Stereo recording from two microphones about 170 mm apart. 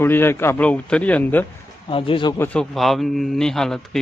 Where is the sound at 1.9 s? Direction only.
30° left (ahead or behind).